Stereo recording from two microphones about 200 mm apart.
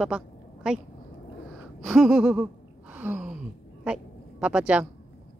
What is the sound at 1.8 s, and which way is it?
Gasp, centre (ahead or behind).